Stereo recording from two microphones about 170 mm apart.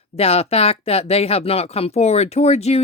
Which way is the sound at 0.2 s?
35° left (ahead or behind).